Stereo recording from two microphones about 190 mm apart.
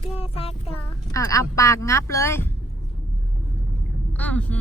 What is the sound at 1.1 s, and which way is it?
Speech, 15° left (ahead or behind).